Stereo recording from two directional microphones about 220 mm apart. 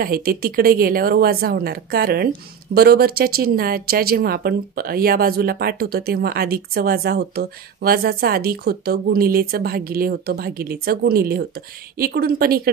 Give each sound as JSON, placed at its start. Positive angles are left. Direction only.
{"t": 0.0, "sound": "speech", "side_deg": -45}